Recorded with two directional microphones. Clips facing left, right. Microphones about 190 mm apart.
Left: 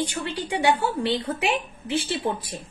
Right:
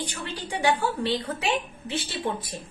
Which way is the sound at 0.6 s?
30° left (ahead or behind).